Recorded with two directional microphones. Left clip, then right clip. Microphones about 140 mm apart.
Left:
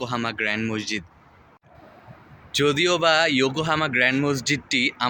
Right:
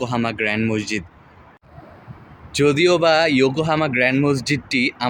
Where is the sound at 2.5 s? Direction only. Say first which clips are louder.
Right 4 dB; 15° right (ahead or behind).